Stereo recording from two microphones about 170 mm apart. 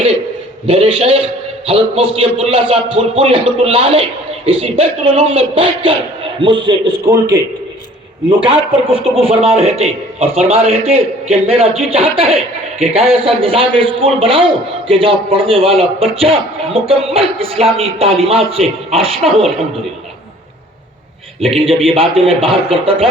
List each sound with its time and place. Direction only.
0.7 s a man's voice: 35° right (ahead or behind)
9.1 s a man's voice: 35° right (ahead or behind)
21.4 s a man's voice: 35° right (ahead or behind)